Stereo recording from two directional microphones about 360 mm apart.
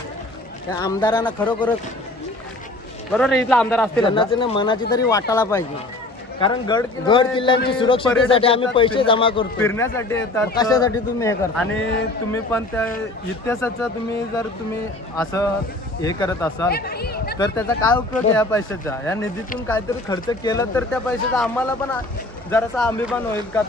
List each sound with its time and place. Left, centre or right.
0.7 s a man's voice: centre
3.1 s a man's voice: centre
15.1 s a man's voice: centre
16.7 s speech: left
17.4 s a man's voice: centre